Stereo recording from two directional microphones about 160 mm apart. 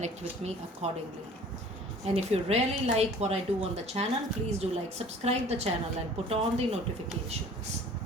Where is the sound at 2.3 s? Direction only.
40° right (ahead or behind).